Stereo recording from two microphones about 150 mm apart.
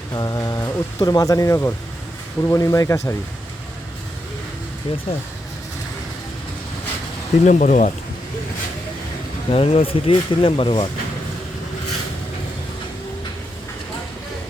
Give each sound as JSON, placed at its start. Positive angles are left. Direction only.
{"t": 0.1, "sound": "speech", "side_deg": 25}
{"t": 4.9, "sound": "speech", "side_deg": 35}
{"t": 7.4, "sound": "speech", "side_deg": 55}
{"t": 9.5, "sound": "speech", "side_deg": 40}